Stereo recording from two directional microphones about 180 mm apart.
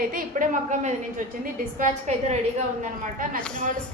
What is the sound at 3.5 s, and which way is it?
Speech, 45° right (ahead or behind).